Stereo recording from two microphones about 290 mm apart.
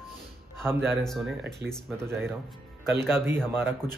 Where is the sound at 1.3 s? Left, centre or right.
Right.